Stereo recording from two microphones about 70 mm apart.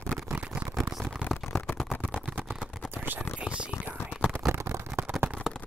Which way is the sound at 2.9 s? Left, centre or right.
Right.